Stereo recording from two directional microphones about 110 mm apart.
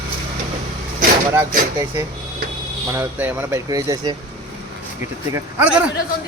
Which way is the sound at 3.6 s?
35° right (ahead or behind).